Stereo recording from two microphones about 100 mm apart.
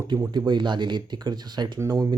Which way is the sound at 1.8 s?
35° right (ahead or behind).